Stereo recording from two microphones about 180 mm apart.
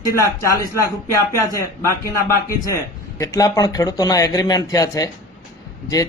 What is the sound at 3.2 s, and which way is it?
Speech, 20° left (ahead or behind).